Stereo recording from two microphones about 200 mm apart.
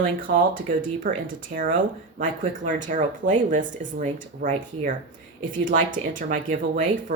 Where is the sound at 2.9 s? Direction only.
40° right (ahead or behind).